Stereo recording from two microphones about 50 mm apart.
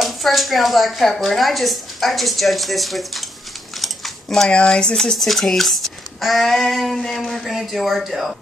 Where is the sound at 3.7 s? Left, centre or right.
Centre.